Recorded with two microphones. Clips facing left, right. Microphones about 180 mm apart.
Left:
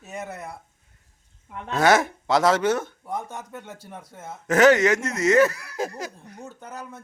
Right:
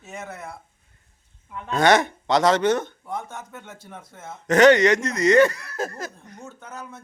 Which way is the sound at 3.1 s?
35° left (ahead or behind).